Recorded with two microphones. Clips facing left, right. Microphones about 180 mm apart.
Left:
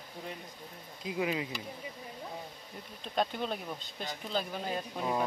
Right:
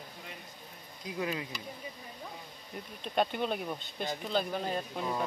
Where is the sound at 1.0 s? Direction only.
15° left (ahead or behind).